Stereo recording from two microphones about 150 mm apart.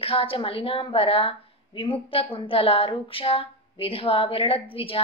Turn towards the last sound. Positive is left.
turn(degrees=40)  # may be behind; listen again after turning